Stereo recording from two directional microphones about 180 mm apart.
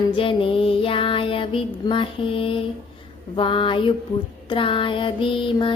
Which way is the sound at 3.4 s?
30° left (ahead or behind).